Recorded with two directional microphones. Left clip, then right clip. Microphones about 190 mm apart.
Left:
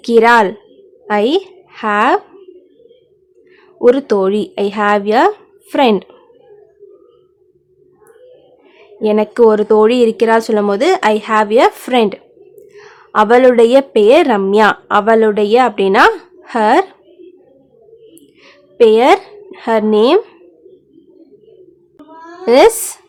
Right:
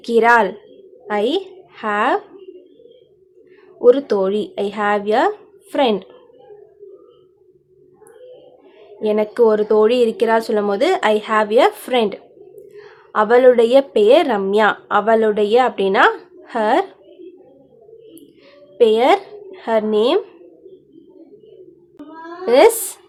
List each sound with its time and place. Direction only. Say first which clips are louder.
0.0 s a woman's voice: left 4 dB; 40° left (ahead or behind)
3.8 s speech: left 2 dB; 40° left (ahead or behind)
9.0 s a woman's voice: left 4 dB; 40° left (ahead or behind)
18.8 s speech: left 5 dB; 40° left (ahead or behind)
22.4 s speech: left 3 dB; 40° left (ahead or behind)